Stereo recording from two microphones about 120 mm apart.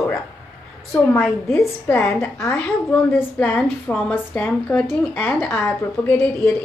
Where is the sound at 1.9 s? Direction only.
20° left (ahead or behind).